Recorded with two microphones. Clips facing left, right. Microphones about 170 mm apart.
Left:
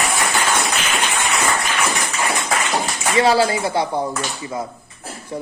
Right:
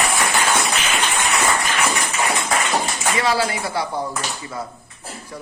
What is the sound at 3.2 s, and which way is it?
A woman's voice, 25° left (ahead or behind).